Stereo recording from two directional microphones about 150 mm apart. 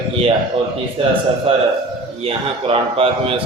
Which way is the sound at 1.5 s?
40° right (ahead or behind).